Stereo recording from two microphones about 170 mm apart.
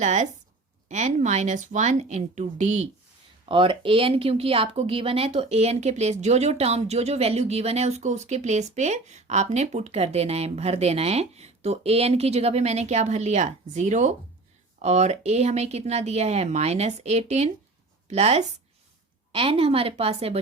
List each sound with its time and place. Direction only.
0.0 s speech: 45° right (ahead or behind)
3.5 s speech: 30° right (ahead or behind)